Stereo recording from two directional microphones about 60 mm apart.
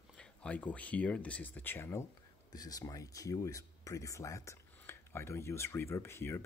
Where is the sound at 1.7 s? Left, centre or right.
Left.